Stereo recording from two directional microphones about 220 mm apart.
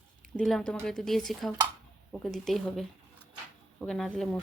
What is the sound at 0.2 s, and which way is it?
Speech, centre (ahead or behind).